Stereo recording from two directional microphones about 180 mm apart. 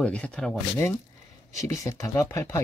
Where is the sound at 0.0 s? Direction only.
5° left (ahead or behind).